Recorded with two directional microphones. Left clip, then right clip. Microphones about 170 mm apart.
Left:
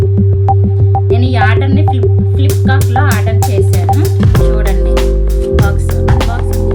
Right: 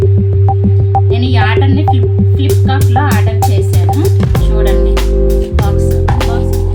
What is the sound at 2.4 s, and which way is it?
Speech, centre (ahead or behind).